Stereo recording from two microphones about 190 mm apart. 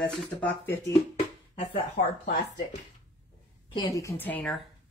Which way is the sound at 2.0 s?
60° left (ahead or behind).